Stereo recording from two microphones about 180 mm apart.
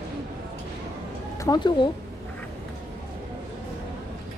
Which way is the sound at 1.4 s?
20° left (ahead or behind).